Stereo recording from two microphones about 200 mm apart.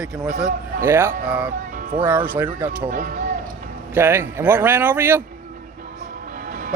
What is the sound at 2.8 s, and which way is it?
Speech, 40° right (ahead or behind).